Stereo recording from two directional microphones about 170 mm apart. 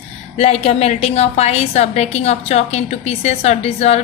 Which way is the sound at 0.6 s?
40° left (ahead or behind).